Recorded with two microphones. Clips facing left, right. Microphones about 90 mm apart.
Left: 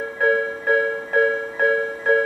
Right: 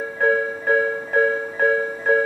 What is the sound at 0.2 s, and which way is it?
Music, centre (ahead or behind).